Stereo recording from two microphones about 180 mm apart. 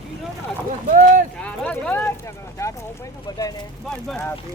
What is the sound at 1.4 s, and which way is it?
Speech, 5° left (ahead or behind).